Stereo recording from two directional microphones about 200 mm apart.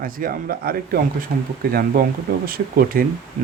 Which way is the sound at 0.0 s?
45° right (ahead or behind).